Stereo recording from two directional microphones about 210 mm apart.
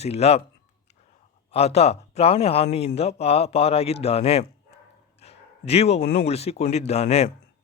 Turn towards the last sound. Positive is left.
turn(degrees=30)  # may be behind; listen again after turning